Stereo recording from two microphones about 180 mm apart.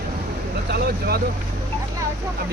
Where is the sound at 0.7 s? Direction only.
60° right (ahead or behind).